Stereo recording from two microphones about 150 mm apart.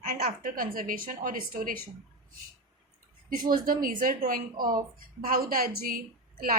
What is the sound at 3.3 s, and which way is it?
A woman's voice, 70° right (ahead or behind).